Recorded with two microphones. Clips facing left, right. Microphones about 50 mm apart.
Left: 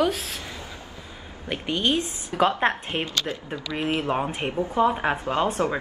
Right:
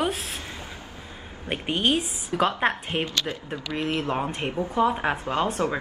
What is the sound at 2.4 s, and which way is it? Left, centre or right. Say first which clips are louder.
A woman's voice: left 2 dB; centre.